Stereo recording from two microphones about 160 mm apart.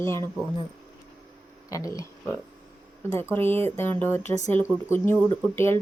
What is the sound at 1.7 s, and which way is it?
Speech, 20° left (ahead or behind).